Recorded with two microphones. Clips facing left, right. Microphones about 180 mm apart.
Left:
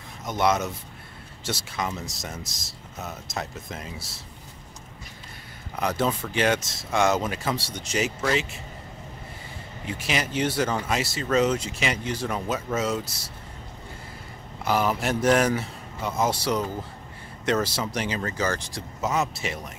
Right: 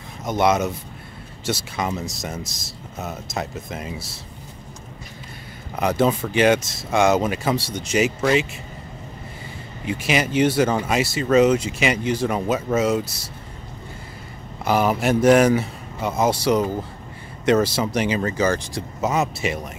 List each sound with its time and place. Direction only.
0.3 s speech: 15° right (ahead or behind)
3.0 s speech: 15° right (ahead or behind)
5.8 s speech: 15° right (ahead or behind)
9.8 s speech: 15° right (ahead or behind)
14.7 s speech: 15° right (ahead or behind)